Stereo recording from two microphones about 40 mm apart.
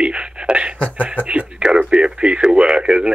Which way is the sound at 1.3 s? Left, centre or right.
Right.